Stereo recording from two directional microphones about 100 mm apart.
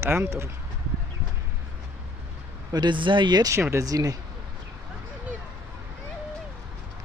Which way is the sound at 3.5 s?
30° right (ahead or behind).